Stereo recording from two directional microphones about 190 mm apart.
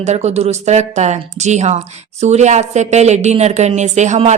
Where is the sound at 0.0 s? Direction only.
35° right (ahead or behind).